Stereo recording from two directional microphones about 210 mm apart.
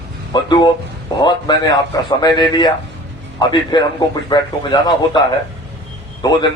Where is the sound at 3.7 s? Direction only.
20° left (ahead or behind).